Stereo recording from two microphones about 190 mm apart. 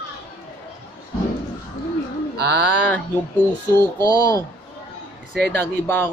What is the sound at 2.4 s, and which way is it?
Speech, 60° right (ahead or behind).